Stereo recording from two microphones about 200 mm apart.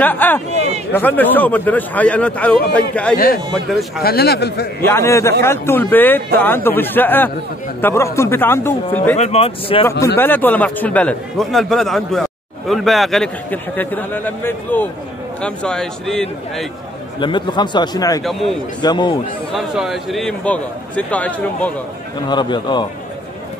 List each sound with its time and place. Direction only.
0.0 s a man's voice: 10° left (ahead or behind)
4.0 s a man's voice: 50° left (ahead or behind)
4.8 s a man's voice: 15° left (ahead or behind)
9.1 s speech: 30° left (ahead or behind)
10.1 s a man's voice: 10° left (ahead or behind)
17.2 s speech: 25° left (ahead or behind)
18.2 s a man's voice: centre (ahead or behind)
18.8 s speech: 20° left (ahead or behind)
19.5 s a man's voice: centre (ahead or behind)
22.3 s speech: 20° left (ahead or behind)